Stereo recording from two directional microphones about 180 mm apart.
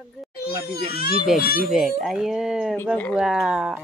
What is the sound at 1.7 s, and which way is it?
Speech, centre (ahead or behind).